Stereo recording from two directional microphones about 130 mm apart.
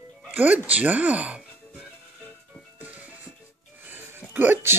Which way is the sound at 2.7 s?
10° right (ahead or behind).